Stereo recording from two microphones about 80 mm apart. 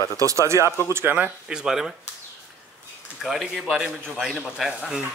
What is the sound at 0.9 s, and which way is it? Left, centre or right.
Speech, right.